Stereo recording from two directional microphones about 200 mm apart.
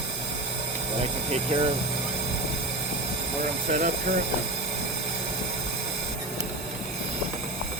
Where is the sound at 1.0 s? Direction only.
30° right (ahead or behind).